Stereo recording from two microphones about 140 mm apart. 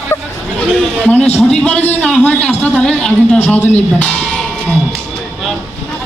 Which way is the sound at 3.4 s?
10° left (ahead or behind).